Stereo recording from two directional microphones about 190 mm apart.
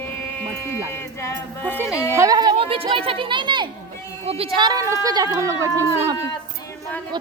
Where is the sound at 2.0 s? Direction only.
15° right (ahead or behind).